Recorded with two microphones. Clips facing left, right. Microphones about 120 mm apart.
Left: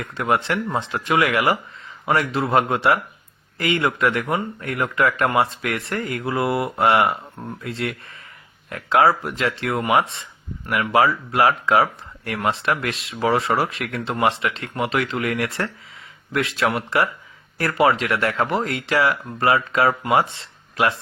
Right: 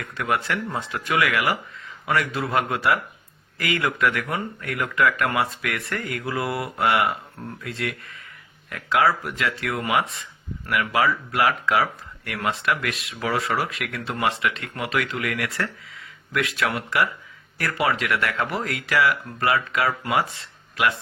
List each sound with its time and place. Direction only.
0.0 s speech: 25° left (ahead or behind)